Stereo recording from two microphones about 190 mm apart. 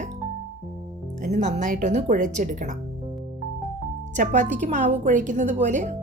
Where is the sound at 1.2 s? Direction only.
35° right (ahead or behind).